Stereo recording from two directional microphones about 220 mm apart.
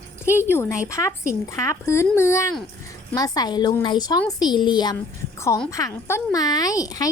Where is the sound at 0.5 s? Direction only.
10° left (ahead or behind).